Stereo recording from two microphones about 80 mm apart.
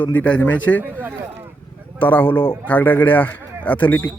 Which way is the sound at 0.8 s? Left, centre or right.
Right.